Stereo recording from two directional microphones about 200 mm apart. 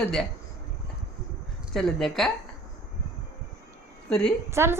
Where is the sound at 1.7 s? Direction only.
Centre (ahead or behind).